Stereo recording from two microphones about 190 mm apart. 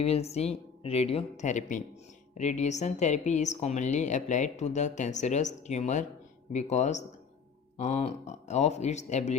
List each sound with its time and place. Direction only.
0.0 s a woman's voice: 35° left (ahead or behind)